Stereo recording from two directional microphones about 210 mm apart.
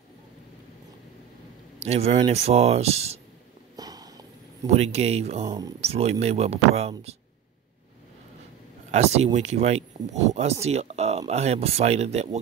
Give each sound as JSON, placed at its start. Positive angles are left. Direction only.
{"t": 1.8, "sound": "speech", "side_deg": -30}
{"t": 3.7, "sound": "a sound", "side_deg": -20}
{"t": 4.6, "sound": "speech", "side_deg": -30}
{"t": 5.4, "sound": "speech", "side_deg": -15}
{"t": 5.8, "sound": "speech", "side_deg": -30}
{"t": 8.9, "sound": "speech", "side_deg": -30}